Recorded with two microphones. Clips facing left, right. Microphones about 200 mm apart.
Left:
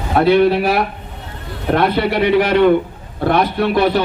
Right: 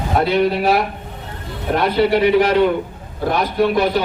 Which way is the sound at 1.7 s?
60° left (ahead or behind).